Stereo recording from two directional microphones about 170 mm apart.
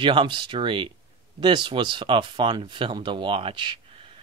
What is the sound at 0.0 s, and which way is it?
Speech, 30° right (ahead or behind).